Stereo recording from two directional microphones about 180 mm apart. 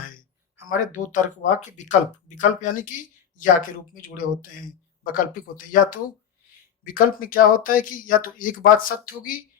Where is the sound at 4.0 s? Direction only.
50° left (ahead or behind).